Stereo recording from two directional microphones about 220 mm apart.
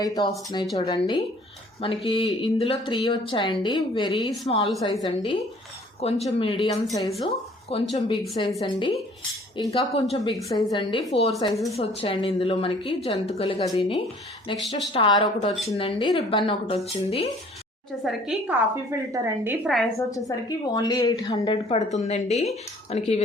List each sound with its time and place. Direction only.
0.0 s a woman's voice: 20° left (ahead or behind)
14.5 s a woman's voice: centre (ahead or behind)
14.9 s speech: 20° left (ahead or behind)
18.0 s a woman's voice: 5° right (ahead or behind)
19.6 s a woman's voice: centre (ahead or behind)
20.0 s a woman's voice: 15° left (ahead or behind)